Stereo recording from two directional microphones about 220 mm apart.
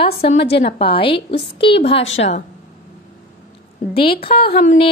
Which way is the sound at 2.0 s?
60° left (ahead or behind).